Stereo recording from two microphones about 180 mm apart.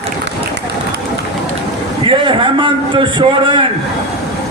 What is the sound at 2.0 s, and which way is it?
A man's voice, 30° right (ahead or behind).